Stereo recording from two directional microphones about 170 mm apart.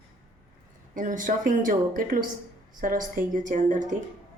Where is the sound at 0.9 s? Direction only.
50° right (ahead or behind).